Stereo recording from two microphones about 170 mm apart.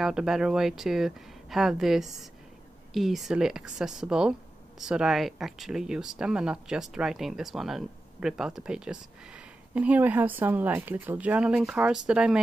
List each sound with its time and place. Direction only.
0.0 s speech: 5° right (ahead or behind)